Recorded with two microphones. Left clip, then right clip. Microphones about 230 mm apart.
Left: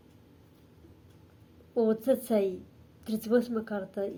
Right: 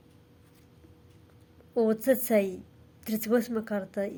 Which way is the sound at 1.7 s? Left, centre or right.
Right.